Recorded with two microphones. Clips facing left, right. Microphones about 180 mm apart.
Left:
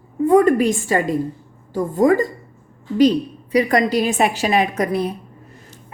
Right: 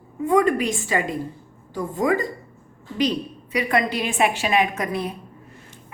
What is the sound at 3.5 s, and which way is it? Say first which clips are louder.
A woman's voice: left 6 dB; 40° left (ahead or behind).